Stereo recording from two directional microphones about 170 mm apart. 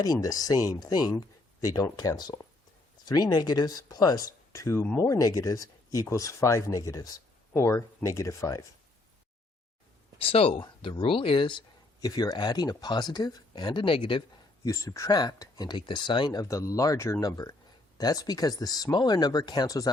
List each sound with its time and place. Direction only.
0.0 s speech: 20° left (ahead or behind)
10.2 s speech: 35° left (ahead or behind)
14.7 s speech: 20° left (ahead or behind)